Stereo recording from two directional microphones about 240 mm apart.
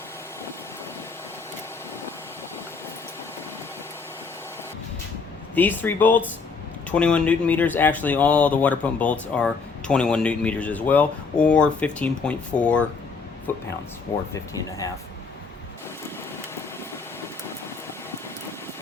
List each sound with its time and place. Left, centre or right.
5.5 s speech: centre